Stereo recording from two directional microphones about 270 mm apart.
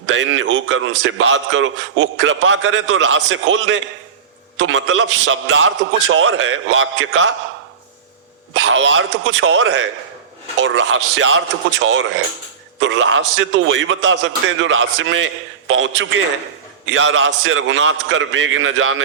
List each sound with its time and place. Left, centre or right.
0.1 s a man's voice: right
8.5 s a man's voice: right